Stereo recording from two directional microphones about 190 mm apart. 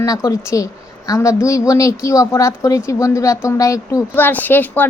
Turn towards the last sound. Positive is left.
turn(degrees=10)  # may be behind; listen again after turning